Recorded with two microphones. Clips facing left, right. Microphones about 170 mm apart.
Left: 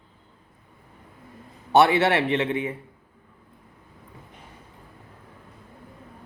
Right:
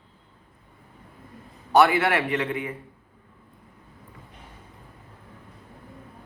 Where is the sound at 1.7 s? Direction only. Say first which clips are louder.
Left 1 dB; 25° left (ahead or behind).